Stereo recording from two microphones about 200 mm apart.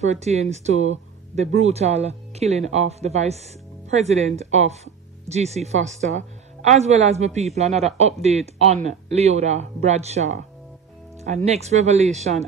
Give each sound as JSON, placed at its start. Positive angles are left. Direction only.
{"t": 0.0, "sound": "speech", "side_deg": -35}